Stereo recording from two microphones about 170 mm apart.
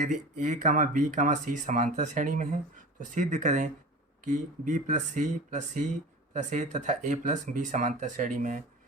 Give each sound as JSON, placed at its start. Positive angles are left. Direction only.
{"t": 0.0, "sound": "speech", "side_deg": -45}